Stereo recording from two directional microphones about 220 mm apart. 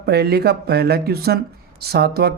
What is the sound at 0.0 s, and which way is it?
Speech, 45° right (ahead or behind).